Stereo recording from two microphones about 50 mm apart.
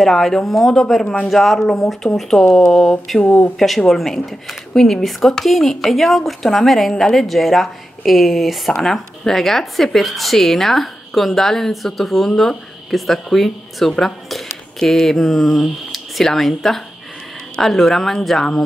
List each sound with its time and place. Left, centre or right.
0.0 s speech: centre
3.3 s speech: left
3.5 s speech: centre